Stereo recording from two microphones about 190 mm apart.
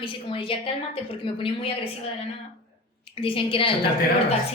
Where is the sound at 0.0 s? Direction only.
25° left (ahead or behind).